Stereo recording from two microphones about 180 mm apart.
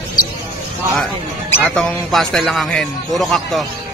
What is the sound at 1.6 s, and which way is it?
Speech, 5° left (ahead or behind).